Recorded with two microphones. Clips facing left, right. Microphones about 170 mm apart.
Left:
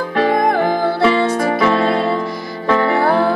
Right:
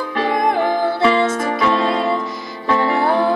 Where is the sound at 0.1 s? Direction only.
50° left (ahead or behind).